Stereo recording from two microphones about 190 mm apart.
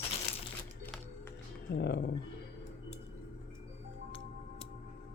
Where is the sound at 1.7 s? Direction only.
60° left (ahead or behind).